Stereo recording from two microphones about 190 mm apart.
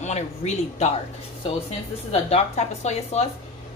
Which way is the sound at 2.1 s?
35° left (ahead or behind).